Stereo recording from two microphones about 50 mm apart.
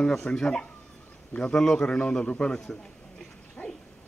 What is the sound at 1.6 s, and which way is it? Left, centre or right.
Speech, centre.